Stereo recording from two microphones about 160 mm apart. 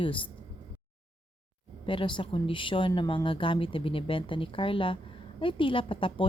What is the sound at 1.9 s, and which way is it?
A woman's voice, 30° left (ahead or behind).